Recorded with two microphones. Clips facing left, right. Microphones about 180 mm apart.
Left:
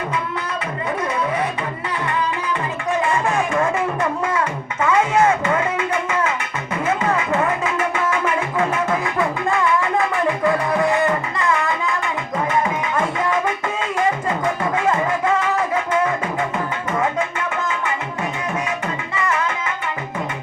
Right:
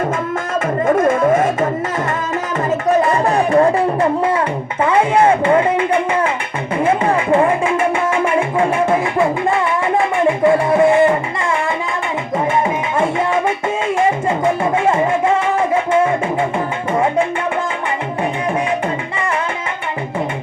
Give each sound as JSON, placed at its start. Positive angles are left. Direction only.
{"t": 0.9, "sound": "music", "side_deg": -50}
{"t": 2.6, "sound": "a sound", "side_deg": -40}
{"t": 6.8, "sound": "music", "side_deg": -30}